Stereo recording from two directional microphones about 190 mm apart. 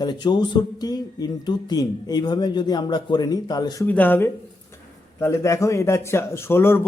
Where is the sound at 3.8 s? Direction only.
10° left (ahead or behind).